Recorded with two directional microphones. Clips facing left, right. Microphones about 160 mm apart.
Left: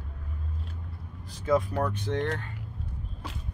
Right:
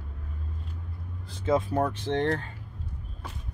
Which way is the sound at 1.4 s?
25° right (ahead or behind).